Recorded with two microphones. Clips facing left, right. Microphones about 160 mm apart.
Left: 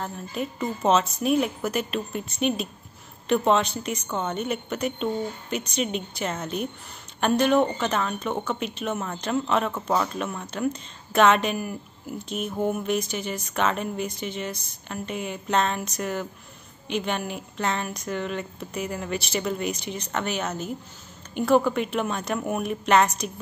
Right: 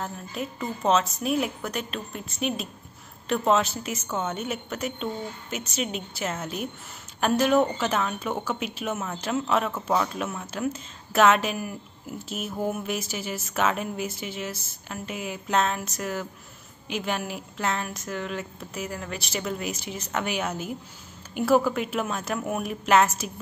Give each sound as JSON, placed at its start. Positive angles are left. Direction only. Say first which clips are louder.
{"t": 0.0, "sound": "a woman's voice", "louder": "left 2 dB", "side_deg": 0}